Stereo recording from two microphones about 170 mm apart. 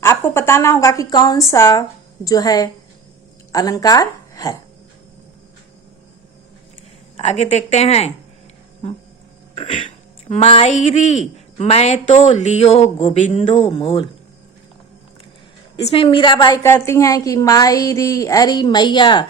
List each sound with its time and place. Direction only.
0.0 s a woman's voice: 15° left (ahead or behind)
7.2 s speech: 40° left (ahead or behind)
9.6 s speech: 30° left (ahead or behind)
15.7 s a woman's voice: 30° left (ahead or behind)